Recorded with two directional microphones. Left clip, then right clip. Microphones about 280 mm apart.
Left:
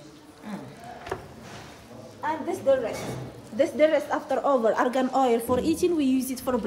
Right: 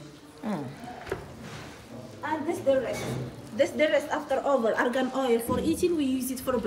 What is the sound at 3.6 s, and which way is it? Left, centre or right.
Speech, left.